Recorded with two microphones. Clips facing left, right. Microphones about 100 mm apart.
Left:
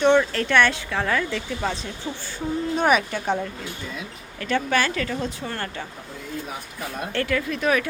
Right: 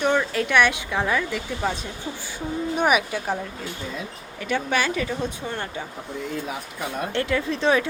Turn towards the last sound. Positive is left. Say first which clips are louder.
# right 1 dB
turn(degrees=-30)  # may be behind; listen again after turning